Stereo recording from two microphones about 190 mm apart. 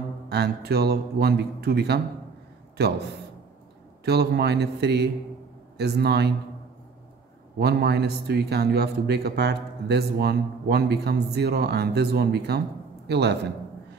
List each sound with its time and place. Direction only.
0.3 s a man's voice: 60° right (ahead or behind)
4.0 s a man's voice: 60° right (ahead or behind)
7.5 s a man's voice: 60° right (ahead or behind)